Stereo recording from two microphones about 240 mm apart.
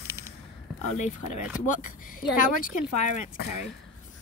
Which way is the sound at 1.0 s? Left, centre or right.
Left.